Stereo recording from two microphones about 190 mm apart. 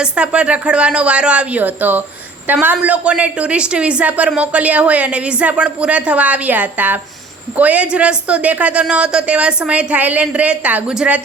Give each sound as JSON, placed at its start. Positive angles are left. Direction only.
{"t": 0.0, "sound": "a woman's voice", "side_deg": -5}